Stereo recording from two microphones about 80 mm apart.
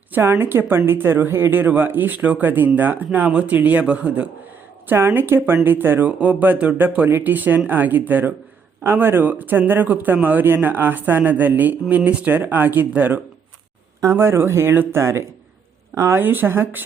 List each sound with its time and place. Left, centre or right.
0.1 s speech: right
14.2 s speech: right